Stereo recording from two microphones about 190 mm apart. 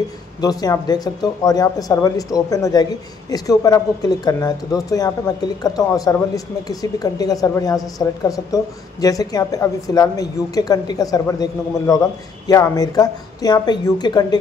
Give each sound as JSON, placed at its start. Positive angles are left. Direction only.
{"t": 0.4, "sound": "speech", "side_deg": 20}